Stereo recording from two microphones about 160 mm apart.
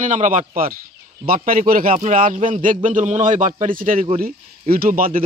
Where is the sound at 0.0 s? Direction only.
55° right (ahead or behind).